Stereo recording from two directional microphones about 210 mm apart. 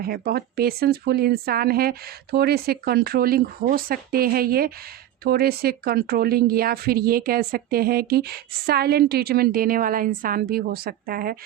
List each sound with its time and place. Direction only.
0.0 s speech: 50° right (ahead or behind)